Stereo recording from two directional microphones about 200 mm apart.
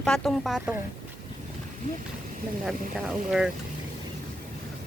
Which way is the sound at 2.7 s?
5° right (ahead or behind).